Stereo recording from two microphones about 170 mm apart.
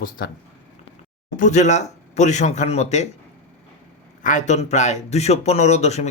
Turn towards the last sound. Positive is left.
turn(degrees=40)  # may be behind; listen again after turning